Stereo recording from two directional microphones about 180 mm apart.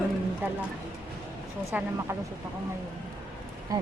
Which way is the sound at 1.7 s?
10° right (ahead or behind).